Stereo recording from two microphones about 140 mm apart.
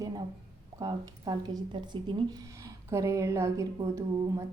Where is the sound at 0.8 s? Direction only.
25° right (ahead or behind).